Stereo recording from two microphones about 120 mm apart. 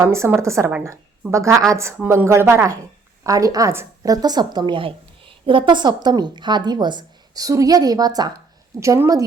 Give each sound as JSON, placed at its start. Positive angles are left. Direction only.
{"t": 0.0, "sound": "a woman's voice", "side_deg": -25}